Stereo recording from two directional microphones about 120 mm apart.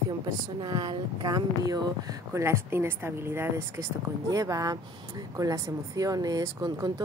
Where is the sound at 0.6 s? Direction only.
35° right (ahead or behind).